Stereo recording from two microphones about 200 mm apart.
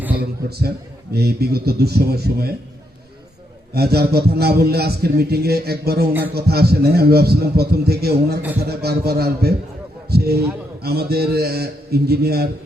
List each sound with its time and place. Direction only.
1.1 s a man's voice: 50° right (ahead or behind)
3.8 s a man's voice: 50° right (ahead or behind)